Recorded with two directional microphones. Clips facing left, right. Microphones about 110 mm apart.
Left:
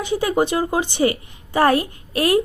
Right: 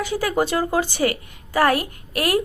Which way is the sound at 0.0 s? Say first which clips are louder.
Left 2 dB; 25° left (ahead or behind).